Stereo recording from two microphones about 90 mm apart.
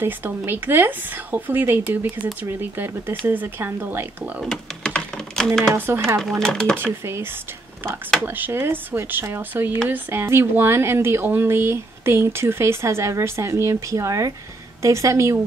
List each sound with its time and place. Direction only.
0.0 s speech: 25° right (ahead or behind)
4.5 s typing: 10° left (ahead or behind)
5.8 s speech: 30° right (ahead or behind)
6.4 s speech: 5° left (ahead or behind)
8.3 s a woman's voice: 20° right (ahead or behind)